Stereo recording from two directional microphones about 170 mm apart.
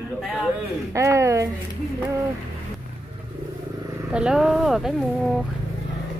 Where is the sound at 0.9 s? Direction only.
15° right (ahead or behind).